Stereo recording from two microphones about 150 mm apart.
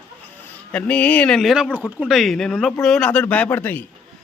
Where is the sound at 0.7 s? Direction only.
10° left (ahead or behind).